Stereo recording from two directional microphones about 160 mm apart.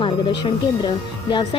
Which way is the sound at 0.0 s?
30° left (ahead or behind).